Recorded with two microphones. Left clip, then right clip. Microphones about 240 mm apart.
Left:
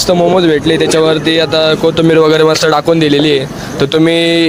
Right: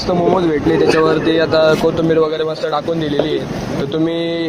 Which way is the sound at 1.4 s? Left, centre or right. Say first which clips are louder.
Left 2 dB; left.